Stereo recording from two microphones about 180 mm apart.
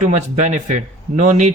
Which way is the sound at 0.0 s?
40° right (ahead or behind).